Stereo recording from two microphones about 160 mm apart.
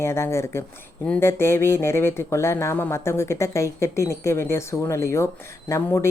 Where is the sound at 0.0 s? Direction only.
15° left (ahead or behind).